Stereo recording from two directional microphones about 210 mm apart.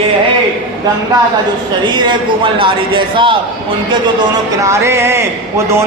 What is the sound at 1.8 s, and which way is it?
A man's voice, 20° right (ahead or behind).